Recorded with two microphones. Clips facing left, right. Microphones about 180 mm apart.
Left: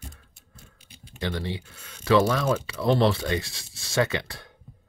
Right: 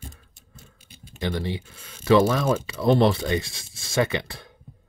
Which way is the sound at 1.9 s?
25° right (ahead or behind).